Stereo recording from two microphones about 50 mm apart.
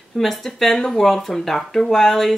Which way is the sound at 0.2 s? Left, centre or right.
Centre.